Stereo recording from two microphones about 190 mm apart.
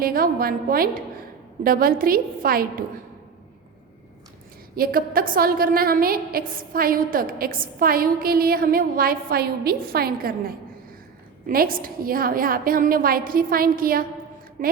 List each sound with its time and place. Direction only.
0.0 s a woman's voice: 50° right (ahead or behind)
4.7 s a woman's voice: 50° right (ahead or behind)